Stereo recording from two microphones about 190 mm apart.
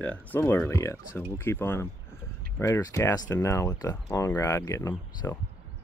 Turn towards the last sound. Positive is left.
turn(degrees=15)  # may be behind; listen again after turning